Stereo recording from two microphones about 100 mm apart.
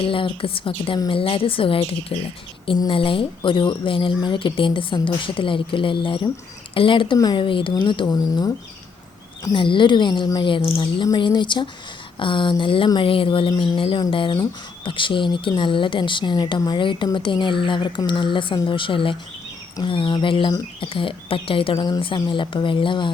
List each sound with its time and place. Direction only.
0.0 s speech: 60° left (ahead or behind); by 8.5 s 40° left (ahead or behind)
9.4 s speech: 55° left (ahead or behind)
11.1 s speech: 45° left (ahead or behind)